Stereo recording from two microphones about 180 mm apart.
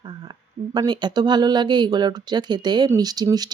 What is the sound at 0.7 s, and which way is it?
Speech, 25° right (ahead or behind).